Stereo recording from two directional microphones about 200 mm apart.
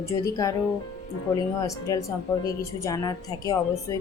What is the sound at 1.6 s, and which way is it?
Speech, 15° left (ahead or behind).